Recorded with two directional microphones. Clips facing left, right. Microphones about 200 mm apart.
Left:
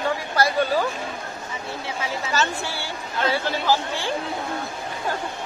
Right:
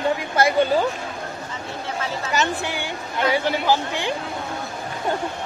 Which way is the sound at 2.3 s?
15° right (ahead or behind).